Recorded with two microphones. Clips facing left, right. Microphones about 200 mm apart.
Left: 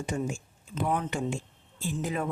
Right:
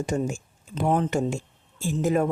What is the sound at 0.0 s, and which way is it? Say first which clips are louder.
Speech: right 5 dB; 45° right (ahead or behind).